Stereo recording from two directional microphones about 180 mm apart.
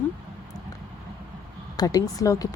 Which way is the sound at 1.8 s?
20° left (ahead or behind).